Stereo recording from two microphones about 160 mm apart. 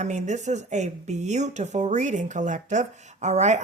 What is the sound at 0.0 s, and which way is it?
Speech, 45° right (ahead or behind).